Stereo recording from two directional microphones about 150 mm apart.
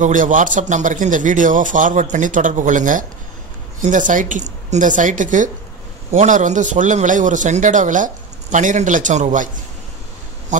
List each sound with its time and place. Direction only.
0.0 s speech: 60° right (ahead or behind)
10.5 s speech: 55° right (ahead or behind)